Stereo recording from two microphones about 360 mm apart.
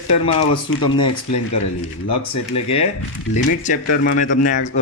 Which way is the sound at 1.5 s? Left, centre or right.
Left.